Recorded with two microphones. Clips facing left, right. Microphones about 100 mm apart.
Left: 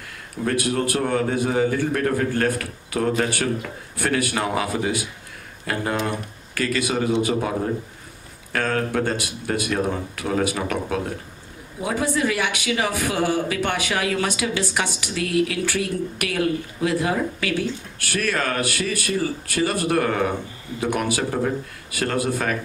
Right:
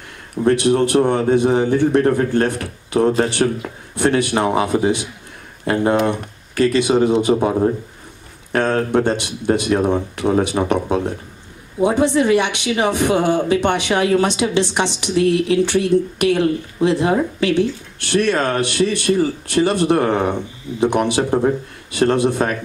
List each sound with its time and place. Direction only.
0.4 s a man's voice: 25° right (ahead or behind)